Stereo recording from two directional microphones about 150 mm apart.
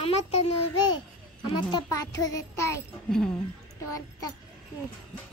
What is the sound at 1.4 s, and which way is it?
Speech, 35° left (ahead or behind).